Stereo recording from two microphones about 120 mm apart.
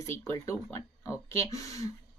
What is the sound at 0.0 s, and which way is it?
Speech, 25° left (ahead or behind).